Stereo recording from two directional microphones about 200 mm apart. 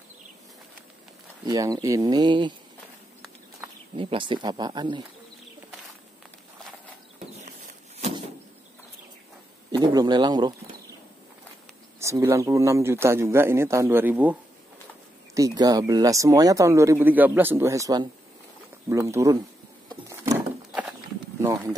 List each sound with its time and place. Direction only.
1.4 s speech: 15° right (ahead or behind)
3.9 s speech: 25° right (ahead or behind)
9.7 s a man's voice: 20° right (ahead or behind)
12.0 s speech: 15° right (ahead or behind)
15.3 s speech: 15° right (ahead or behind)
20.1 s wood: 10° right (ahead or behind)
21.4 s speech: 15° right (ahead or behind)